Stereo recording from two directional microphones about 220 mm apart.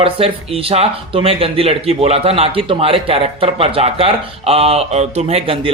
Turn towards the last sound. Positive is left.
turn(degrees=-25)  # may be behind; listen again after turning